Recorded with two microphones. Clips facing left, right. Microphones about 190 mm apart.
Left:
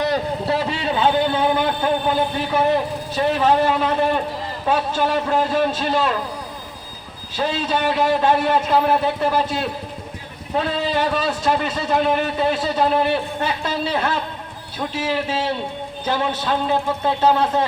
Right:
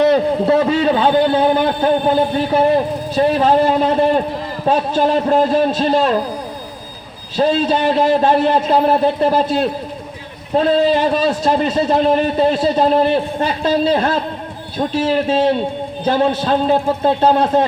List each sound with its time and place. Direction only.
0.0 s a sound: 25° right (ahead or behind)
0.6 s a man's voice: 35° right (ahead or behind)
7.3 s a man's voice: 35° right (ahead or behind)
11.1 s a man's voice: 30° right (ahead or behind)